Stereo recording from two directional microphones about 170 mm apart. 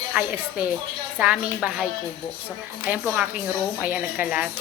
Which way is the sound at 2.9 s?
10° right (ahead or behind).